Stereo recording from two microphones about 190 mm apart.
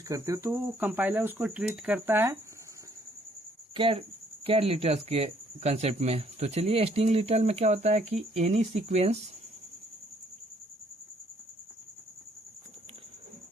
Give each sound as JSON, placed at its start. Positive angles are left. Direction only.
{"t": 0.1, "sound": "speech", "side_deg": -15}
{"t": 3.8, "sound": "speech", "side_deg": -30}